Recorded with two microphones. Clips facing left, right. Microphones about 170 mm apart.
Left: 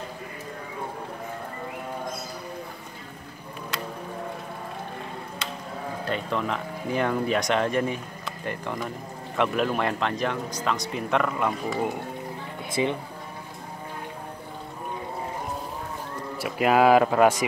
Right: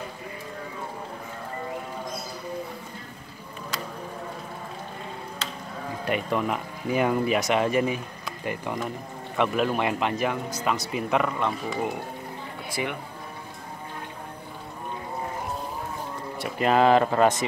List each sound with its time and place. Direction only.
6.0 s speech: 10° right (ahead or behind)
9.4 s speech: centre (ahead or behind)
11.3 s speech: 5° left (ahead or behind)
12.8 s speech: 20° left (ahead or behind)
16.3 s speech: 5° left (ahead or behind)